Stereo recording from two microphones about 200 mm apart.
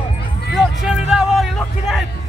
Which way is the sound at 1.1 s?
Centre (ahead or behind).